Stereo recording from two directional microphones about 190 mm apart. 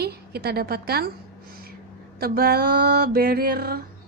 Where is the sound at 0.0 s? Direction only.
55° right (ahead or behind).